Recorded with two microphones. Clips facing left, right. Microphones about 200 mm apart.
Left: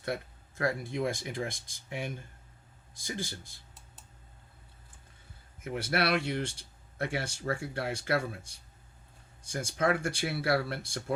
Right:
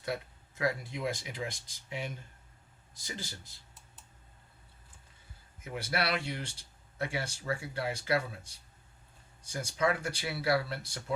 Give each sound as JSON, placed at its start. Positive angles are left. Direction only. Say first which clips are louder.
{"t": 0.5, "sound": "speech", "louder": "left 2 dB", "side_deg": 55}
{"t": 5.6, "sound": "speech", "louder": "left 4 dB", "side_deg": 55}
{"t": 9.5, "sound": "speech", "louder": "left 2 dB", "side_deg": 50}